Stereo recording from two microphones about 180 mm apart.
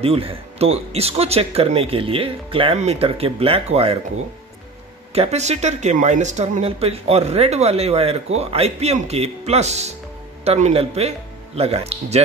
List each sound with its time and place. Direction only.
0.0 s speech: 30° right (ahead or behind)
5.1 s speech: 35° right (ahead or behind)